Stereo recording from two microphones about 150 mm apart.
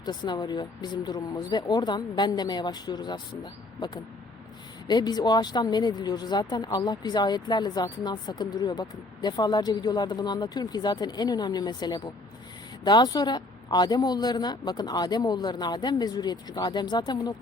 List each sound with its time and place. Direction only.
0.0 s speech: 30° left (ahead or behind)